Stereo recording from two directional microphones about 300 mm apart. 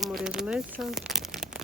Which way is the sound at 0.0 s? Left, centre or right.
Centre.